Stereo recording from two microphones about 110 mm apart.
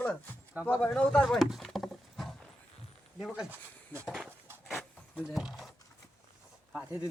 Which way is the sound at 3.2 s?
5° right (ahead or behind).